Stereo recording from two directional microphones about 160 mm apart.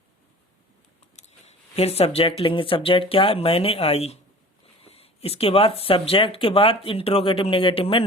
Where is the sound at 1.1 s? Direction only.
40° left (ahead or behind).